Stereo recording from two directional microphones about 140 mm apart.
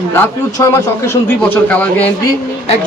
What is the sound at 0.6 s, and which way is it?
Speech, 20° left (ahead or behind).